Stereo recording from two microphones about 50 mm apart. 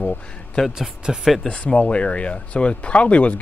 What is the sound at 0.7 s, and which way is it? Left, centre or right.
Speech, centre.